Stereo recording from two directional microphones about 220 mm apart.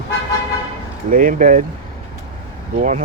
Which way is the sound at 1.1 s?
40° right (ahead or behind).